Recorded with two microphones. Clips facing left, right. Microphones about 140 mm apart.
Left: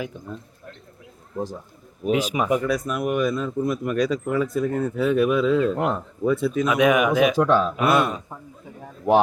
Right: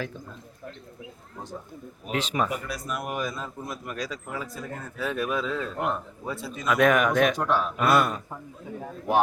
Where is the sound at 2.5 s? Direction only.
50° left (ahead or behind).